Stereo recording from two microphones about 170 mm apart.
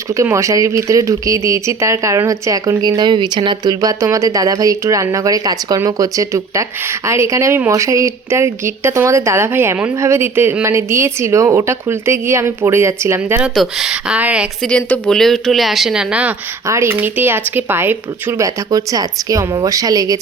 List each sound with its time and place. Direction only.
0.1 s speech: 15° right (ahead or behind)
14.6 s speech: 5° left (ahead or behind); by 20.1 s 20° right (ahead or behind)